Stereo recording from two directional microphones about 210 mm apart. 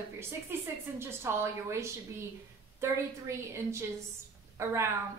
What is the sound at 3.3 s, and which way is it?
Speech, 15° right (ahead or behind).